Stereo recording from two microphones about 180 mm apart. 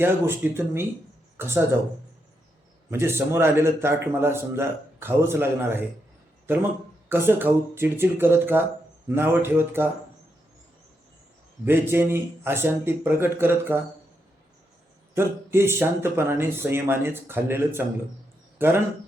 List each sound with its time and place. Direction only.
0.0 s a man's voice: 15° right (ahead or behind)
2.9 s a man's voice: 15° right (ahead or behind)
7.1 s a man's voice: 10° right (ahead or behind)
11.6 s a man's voice: 10° right (ahead or behind)
15.1 s a man's voice: 15° right (ahead or behind)